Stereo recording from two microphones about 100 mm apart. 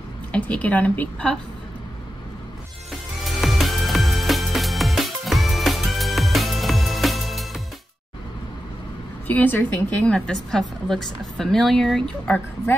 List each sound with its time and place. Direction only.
0.3 s a woman's voice: 15° left (ahead or behind)
3.3 s music: centre (ahead or behind)
9.3 s a woman's voice: 20° left (ahead or behind)
10.1 s a woman's voice: 5° left (ahead or behind)